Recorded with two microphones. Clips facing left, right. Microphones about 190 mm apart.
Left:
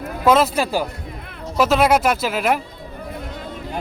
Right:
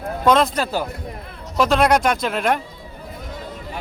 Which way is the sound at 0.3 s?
5° left (ahead or behind).